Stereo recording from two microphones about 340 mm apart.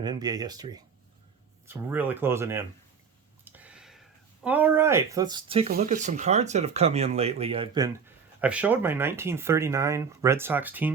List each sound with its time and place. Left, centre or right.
0.0 s speech: centre
3.4 s a sound: centre
4.4 s speech: centre